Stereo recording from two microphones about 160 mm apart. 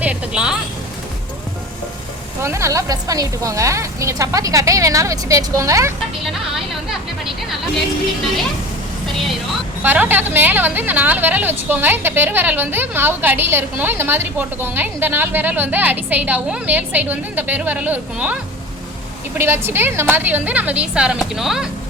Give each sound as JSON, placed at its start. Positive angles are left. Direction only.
{"t": 0.0, "sound": "a sound", "side_deg": -5}
{"t": 2.4, "sound": "a woman's voice", "side_deg": -15}
{"t": 9.8, "sound": "a woman's voice", "side_deg": -10}
{"t": 19.4, "sound": "a woman's voice", "side_deg": -15}